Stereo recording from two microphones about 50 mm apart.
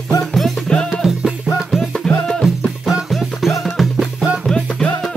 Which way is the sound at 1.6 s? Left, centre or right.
Centre.